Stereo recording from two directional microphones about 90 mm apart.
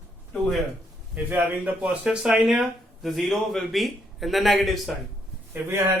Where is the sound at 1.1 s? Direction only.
20° right (ahead or behind).